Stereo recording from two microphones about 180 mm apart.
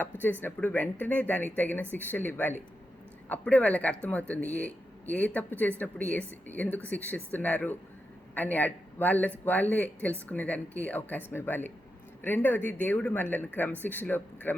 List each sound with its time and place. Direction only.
0.0 s speech: 10° left (ahead or behind)